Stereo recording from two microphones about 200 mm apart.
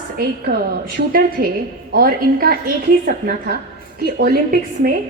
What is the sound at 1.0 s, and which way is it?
A woman's voice, 40° right (ahead or behind).